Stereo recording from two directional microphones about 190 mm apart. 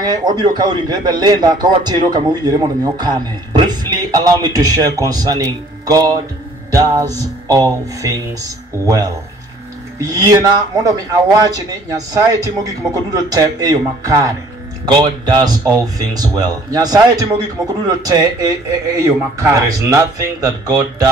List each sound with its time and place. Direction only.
0.0 s a man's voice: 20° right (ahead or behind)
12.1 s a man's voice: 20° right (ahead or behind)